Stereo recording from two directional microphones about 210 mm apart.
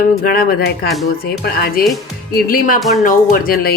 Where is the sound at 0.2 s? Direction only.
45° left (ahead or behind).